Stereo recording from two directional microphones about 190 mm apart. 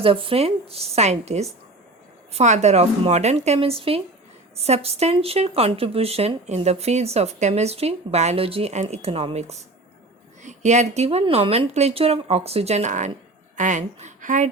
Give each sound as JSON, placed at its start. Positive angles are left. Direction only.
{"t": 0.0, "sound": "a woman's voice", "side_deg": -30}